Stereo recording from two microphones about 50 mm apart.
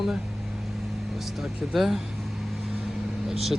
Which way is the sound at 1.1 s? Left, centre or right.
Centre.